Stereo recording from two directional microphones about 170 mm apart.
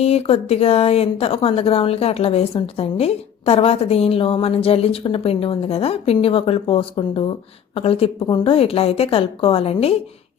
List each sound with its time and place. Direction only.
0.0 s speech: 35° left (ahead or behind)